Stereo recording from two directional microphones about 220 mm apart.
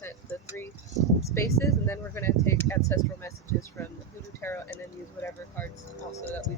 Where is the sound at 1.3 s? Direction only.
15° left (ahead or behind).